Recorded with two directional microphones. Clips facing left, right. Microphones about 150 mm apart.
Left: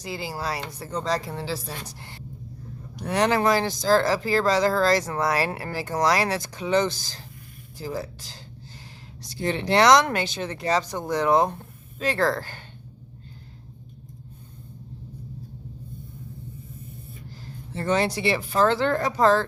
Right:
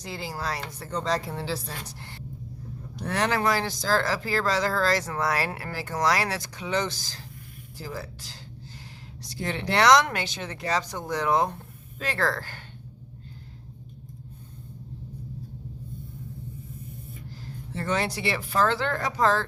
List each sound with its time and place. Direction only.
0.0 s speech: 10° left (ahead or behind)
1.0 s speech: centre (ahead or behind)
1.9 s speech: 15° left (ahead or behind)
9.4 s speech: 25° left (ahead or behind)
17.7 s speech: 30° left (ahead or behind)